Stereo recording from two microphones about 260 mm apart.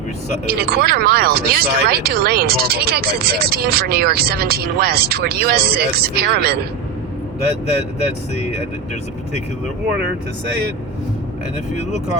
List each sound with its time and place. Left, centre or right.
0.4 s speech: right